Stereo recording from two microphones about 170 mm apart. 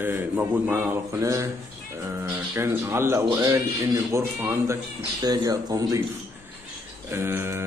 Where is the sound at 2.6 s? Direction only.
15° right (ahead or behind).